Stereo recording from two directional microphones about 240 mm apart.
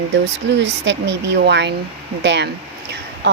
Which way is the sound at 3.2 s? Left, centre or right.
Right.